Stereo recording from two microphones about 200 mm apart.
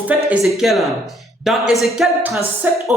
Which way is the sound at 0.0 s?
5° right (ahead or behind).